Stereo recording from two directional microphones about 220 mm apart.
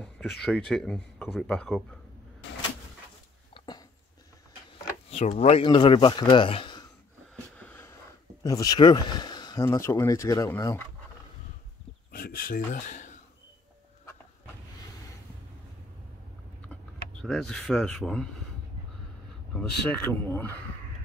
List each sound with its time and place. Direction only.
0.4 s speech: centre (ahead or behind)
3.5 s a sound: 20° left (ahead or behind)
5.1 s speech: 30° left (ahead or behind)
7.6 s a sound: 10° left (ahead or behind)
8.5 s speech: 15° left (ahead or behind)
12.1 s speech: 40° left (ahead or behind)
17.2 s speech: centre (ahead or behind)
19.5 s speech: 10° left (ahead or behind)